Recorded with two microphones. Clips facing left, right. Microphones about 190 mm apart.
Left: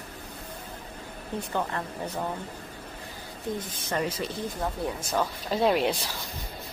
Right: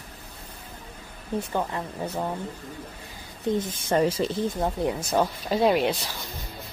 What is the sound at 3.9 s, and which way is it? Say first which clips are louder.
Speech: right 7 dB; 30° right (ahead or behind).